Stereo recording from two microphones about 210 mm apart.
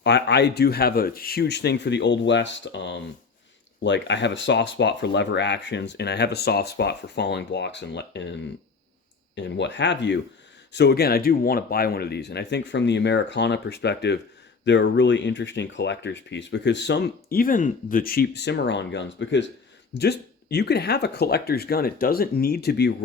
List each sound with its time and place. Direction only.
0.0 s speech: 55° left (ahead or behind)